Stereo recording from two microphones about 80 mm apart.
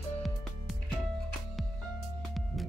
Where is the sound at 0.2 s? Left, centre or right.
Centre.